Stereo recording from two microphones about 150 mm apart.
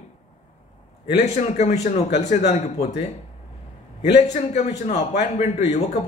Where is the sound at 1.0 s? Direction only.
45° left (ahead or behind).